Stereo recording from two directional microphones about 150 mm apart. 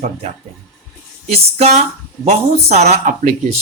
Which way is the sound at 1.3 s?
45° right (ahead or behind).